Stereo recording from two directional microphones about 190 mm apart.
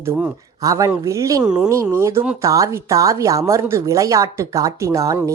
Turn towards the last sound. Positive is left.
turn(degrees=-15)  # may be behind; listen again after turning